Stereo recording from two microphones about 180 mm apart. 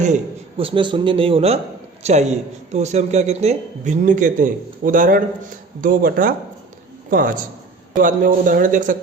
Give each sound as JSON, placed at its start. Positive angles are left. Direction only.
{"t": 0.0, "sound": "a man's voice", "side_deg": -35}